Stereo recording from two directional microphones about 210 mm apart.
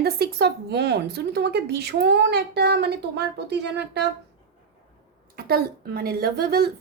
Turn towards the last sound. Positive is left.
turn(degrees=-50)  # may be behind; listen again after turning